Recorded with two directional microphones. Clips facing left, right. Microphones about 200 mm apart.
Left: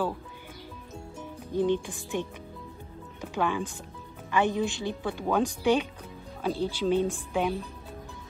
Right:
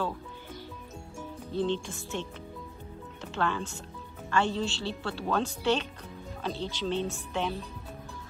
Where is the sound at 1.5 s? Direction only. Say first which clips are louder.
Left 4 dB; 15° left (ahead or behind).